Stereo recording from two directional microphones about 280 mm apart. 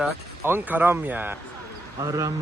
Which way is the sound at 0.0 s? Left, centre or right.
Centre.